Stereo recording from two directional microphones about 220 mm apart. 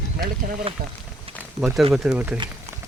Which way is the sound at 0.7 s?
25° right (ahead or behind).